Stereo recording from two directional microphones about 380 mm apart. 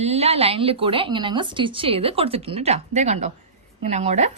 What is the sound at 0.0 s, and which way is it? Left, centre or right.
Speech, centre.